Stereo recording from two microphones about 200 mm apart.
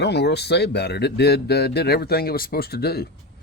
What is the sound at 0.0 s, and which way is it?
Speech, 55° left (ahead or behind).